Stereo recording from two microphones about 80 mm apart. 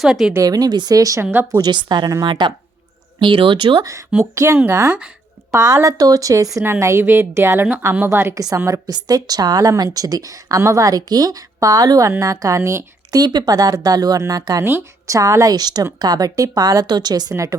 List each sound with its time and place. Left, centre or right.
0.0 s a woman's voice: centre
0.4 s a woman's voice: right
1.2 s a woman's voice: right
1.7 s speech: right
3.2 s speech: right
4.2 s a woman's voice: right
5.5 s a woman's voice: right
8.5 s a woman's voice: right
17.3 s a woman's voice: right